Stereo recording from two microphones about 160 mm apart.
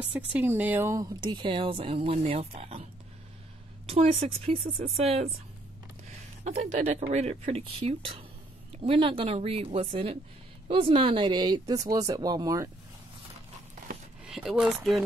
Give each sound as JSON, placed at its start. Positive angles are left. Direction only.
{"t": 0.0, "sound": "speech", "side_deg": -10}
{"t": 3.9, "sound": "speech", "side_deg": -40}
{"t": 4.6, "sound": "speech", "side_deg": -60}
{"t": 4.9, "sound": "speech", "side_deg": -40}
{"t": 6.4, "sound": "speech", "side_deg": -45}
{"t": 14.2, "sound": "speech", "side_deg": -5}